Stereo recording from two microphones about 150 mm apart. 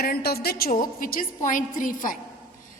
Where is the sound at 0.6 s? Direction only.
70° left (ahead or behind).